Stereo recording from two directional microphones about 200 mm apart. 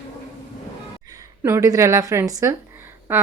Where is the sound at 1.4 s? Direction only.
15° right (ahead or behind).